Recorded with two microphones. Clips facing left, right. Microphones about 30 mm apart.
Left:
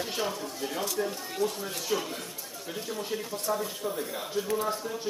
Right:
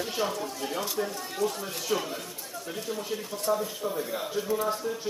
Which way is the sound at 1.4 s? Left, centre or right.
Left.